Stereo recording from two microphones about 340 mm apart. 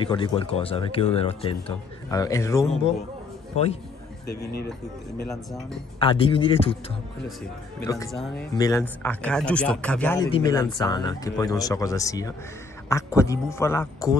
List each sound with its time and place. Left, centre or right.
0.0 s speech: centre
5.9 s speech: centre
7.9 s speech: centre